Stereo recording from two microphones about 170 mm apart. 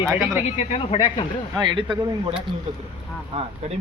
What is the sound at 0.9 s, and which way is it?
Speech, 25° left (ahead or behind).